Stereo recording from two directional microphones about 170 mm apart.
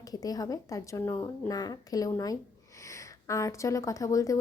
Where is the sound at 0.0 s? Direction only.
20° left (ahead or behind).